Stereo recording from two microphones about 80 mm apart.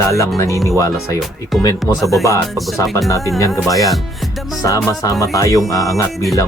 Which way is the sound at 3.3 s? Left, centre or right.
Left.